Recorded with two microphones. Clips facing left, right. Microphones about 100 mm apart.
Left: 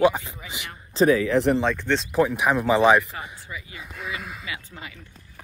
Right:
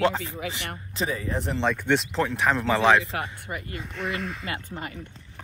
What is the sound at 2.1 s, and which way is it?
Speech, 10° left (ahead or behind).